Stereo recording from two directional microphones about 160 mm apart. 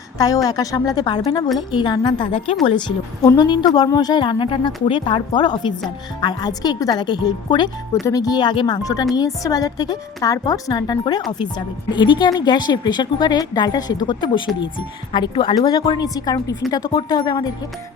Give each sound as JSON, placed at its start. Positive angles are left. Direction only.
{"t": 0.4, "sound": "a woman's voice", "side_deg": 20}